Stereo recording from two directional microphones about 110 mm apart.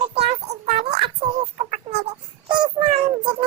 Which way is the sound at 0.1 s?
80° right.